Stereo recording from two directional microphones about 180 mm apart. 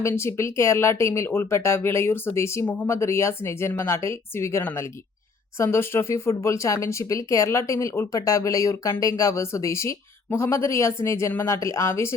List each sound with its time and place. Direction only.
0.0 s speech: 15° left (ahead or behind)